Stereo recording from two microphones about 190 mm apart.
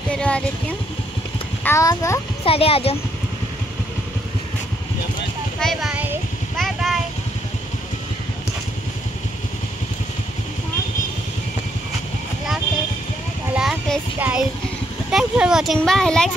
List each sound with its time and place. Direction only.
0.1 s speech: 5° left (ahead or behind)
1.6 s a child's voice: 15° left (ahead or behind)
2.4 s speech: 30° left (ahead or behind)
5.6 s speech: centre (ahead or behind)
6.5 s vehicle: centre (ahead or behind)
13.6 s child singing: 5° right (ahead or behind)
15.0 s speech: 5° right (ahead or behind)